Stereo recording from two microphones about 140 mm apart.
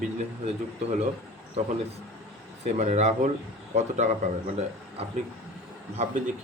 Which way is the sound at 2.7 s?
55° right (ahead or behind).